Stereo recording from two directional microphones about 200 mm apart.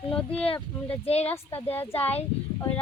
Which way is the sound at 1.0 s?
30° left (ahead or behind).